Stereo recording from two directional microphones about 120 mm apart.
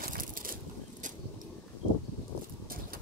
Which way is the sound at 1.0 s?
90° right.